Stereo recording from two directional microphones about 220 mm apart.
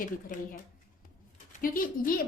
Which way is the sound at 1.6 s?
40° left (ahead or behind).